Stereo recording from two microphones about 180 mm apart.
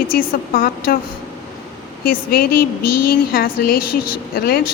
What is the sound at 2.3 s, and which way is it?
A woman's voice, 55° left (ahead or behind).